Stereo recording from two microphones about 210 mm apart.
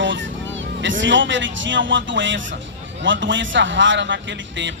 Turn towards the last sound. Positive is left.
turn(degrees=-60)  # may be behind; listen again after turning